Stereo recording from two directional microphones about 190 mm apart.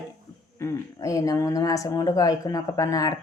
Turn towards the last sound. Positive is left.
turn(degrees=20)  # may be behind; listen again after turning